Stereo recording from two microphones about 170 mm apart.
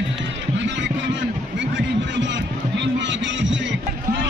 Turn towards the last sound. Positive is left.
turn(degrees=-90)